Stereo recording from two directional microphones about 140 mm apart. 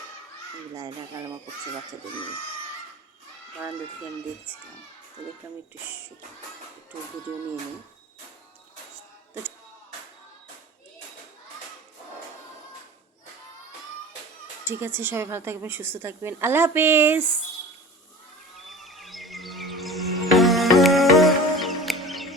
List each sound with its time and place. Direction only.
14.7 s a woman's voice: 15° right (ahead or behind)
18.6 s music: centre (ahead or behind)